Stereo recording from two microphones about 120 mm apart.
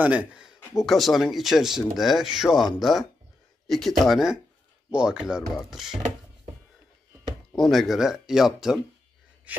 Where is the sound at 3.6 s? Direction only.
Centre (ahead or behind).